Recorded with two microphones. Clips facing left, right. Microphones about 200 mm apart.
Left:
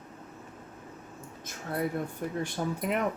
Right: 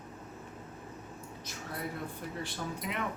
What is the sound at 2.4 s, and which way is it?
Speech, 50° left (ahead or behind).